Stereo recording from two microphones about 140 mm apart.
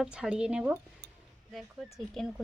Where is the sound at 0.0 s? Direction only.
5° right (ahead or behind).